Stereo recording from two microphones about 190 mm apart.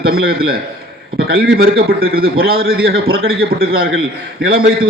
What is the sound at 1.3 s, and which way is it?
Speech, 90° right.